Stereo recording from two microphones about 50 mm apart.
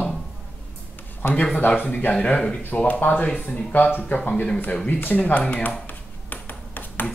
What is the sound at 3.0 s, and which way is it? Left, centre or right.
Speech, left.